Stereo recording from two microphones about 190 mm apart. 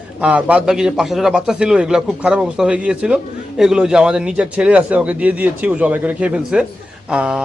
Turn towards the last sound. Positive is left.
turn(degrees=-5)  # may be behind; listen again after turning